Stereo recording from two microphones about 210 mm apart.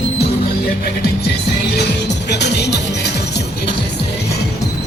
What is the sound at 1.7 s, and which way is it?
Music, 55° left (ahead or behind).